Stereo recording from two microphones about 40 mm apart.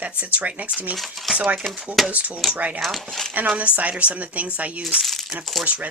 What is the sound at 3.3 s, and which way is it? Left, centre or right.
Speech, right.